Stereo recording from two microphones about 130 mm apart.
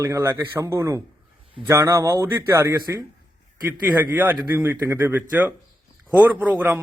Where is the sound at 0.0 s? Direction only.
20° right (ahead or behind).